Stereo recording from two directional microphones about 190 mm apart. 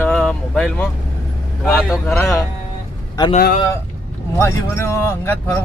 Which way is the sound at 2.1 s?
15° left (ahead or behind).